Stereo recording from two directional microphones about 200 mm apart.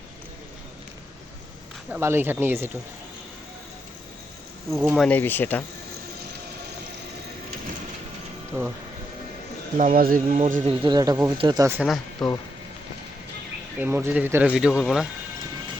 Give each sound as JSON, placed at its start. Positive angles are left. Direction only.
{"t": 1.9, "sound": "speech", "side_deg": -10}
{"t": 4.8, "sound": "speech", "side_deg": 0}
{"t": 9.7, "sound": "speech", "side_deg": -45}
{"t": 10.8, "sound": "speech", "side_deg": -20}
{"t": 11.8, "sound": "speech", "side_deg": 0}
{"t": 13.8, "sound": "speech", "side_deg": -10}